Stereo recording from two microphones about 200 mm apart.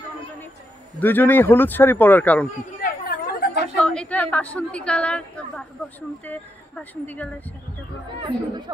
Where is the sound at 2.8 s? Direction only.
50° left (ahead or behind).